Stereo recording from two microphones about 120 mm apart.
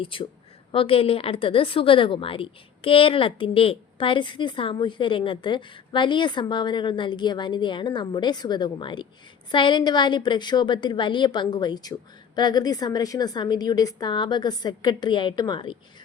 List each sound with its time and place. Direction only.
0.0 s a woman's voice: 45° left (ahead or behind)